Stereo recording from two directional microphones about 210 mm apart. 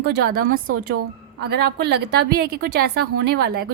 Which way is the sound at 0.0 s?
50° right (ahead or behind).